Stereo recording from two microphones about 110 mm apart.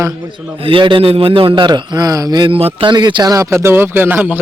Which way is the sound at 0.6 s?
50° right (ahead or behind).